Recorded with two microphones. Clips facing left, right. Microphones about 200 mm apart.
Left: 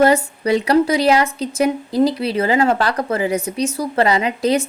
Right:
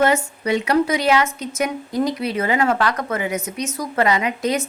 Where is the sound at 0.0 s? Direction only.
35° left (ahead or behind).